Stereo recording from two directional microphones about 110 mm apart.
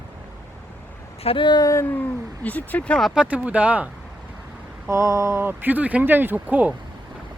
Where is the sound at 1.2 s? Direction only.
60° left (ahead or behind).